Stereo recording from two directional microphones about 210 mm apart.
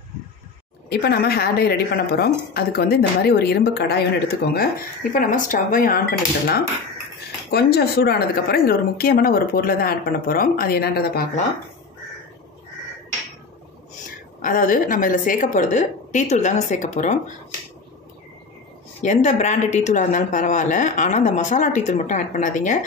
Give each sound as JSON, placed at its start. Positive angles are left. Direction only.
{"t": 0.8, "sound": "a woman's voice", "side_deg": 50}
{"t": 5.1, "sound": "a woman's voice", "side_deg": 40}
{"t": 14.4, "sound": "a woman's voice", "side_deg": 40}
{"t": 19.0, "sound": "a woman's voice", "side_deg": 35}